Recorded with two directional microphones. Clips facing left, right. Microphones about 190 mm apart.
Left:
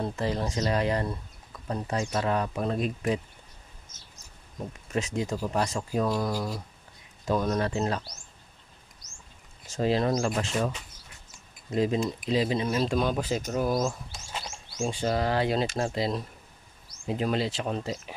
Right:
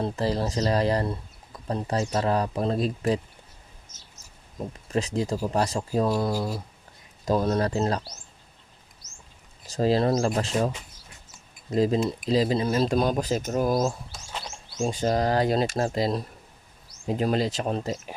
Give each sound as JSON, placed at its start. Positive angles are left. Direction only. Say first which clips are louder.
{"t": 0.0, "sound": "speech", "louder": "right 3 dB", "side_deg": -35}
{"t": 4.9, "sound": "speech", "louder": "right 3 dB", "side_deg": -35}
{"t": 7.3, "sound": "speech", "louder": "right 3 dB", "side_deg": -35}
{"t": 9.6, "sound": "speech", "louder": "right 3 dB", "side_deg": -35}
{"t": 11.7, "sound": "speech", "louder": "right 3 dB", "side_deg": -35}